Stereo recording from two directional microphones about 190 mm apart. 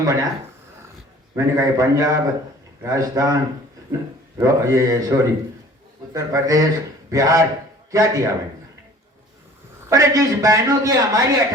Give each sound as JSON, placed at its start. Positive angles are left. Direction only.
{"t": 0.0, "sound": "a man's voice", "side_deg": -20}
{"t": 1.4, "sound": "a man's voice", "side_deg": -15}
{"t": 9.9, "sound": "a man's voice", "side_deg": -15}